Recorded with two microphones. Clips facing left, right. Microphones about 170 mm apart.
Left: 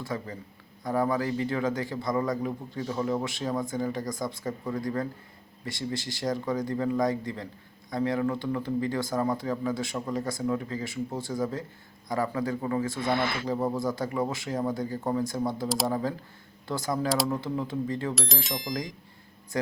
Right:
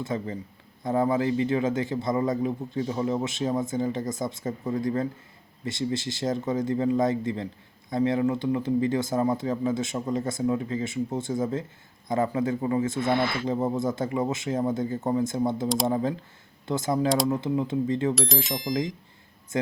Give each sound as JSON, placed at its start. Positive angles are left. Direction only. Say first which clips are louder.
{"t": 0.0, "sound": "a man's voice", "louder": "right 4 dB", "side_deg": -25}
{"t": 18.1, "sound": "speech", "louder": "right 5 dB", "side_deg": 0}